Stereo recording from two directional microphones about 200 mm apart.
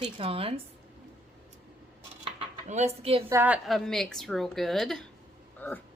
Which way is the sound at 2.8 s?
35° right (ahead or behind).